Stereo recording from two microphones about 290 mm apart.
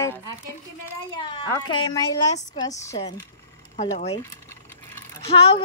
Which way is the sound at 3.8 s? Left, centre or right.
Left.